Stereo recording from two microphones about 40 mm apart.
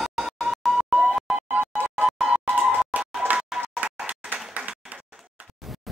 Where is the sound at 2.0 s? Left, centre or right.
Centre.